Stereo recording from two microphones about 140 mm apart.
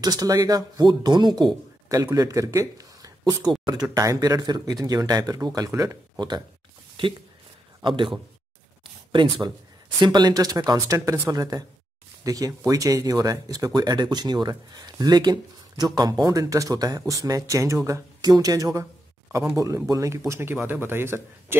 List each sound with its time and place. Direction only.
0.0 s speech: 30° right (ahead or behind)
7.8 s a man's voice: 35° right (ahead or behind)
9.1 s a man's voice: 35° right (ahead or behind); by 21.5 s 15° right (ahead or behind)